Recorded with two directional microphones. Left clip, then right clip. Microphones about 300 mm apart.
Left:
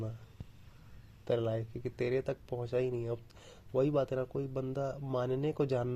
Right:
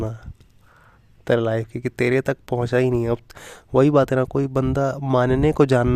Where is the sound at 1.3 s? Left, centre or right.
Right.